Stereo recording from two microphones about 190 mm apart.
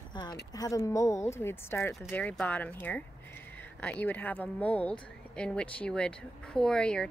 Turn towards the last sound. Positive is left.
turn(degrees=5)  # may be behind; listen again after turning